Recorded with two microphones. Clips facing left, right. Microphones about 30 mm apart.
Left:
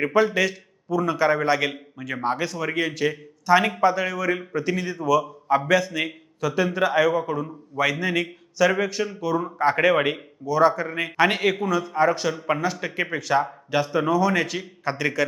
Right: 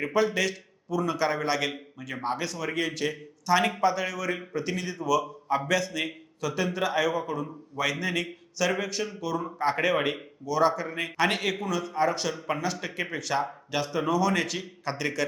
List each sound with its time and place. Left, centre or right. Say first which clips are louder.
0.1 s a man's voice: left 2 dB; centre